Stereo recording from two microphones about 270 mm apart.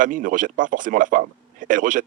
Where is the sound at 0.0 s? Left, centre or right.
Right.